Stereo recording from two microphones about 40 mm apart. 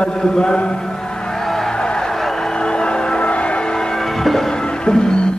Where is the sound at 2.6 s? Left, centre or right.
Left.